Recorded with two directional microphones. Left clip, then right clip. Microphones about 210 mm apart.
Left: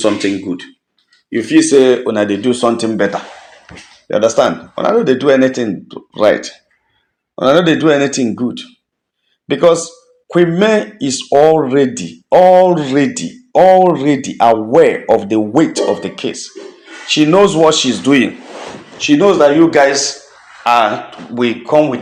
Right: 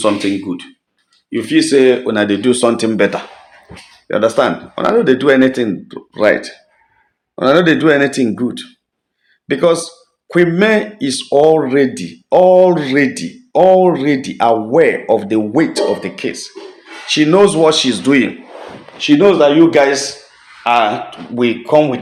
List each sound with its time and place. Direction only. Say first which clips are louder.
0.0 s speech: left 1 dB; centre (ahead or behind); by 3.2 s 20° right (ahead or behind)
4.1 s speech: left 1 dB; centre (ahead or behind)
18.9 s speech: even; 5° right (ahead or behind)